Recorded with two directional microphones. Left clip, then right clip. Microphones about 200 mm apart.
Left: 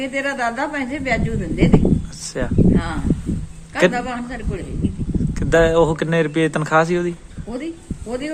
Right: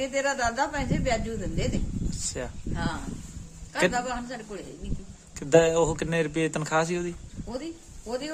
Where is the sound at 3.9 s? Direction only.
20° right (ahead or behind).